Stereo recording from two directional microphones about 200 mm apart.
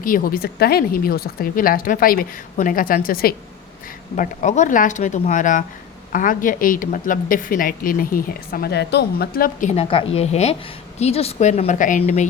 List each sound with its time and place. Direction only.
0.0 s a woman's voice: 45° left (ahead or behind)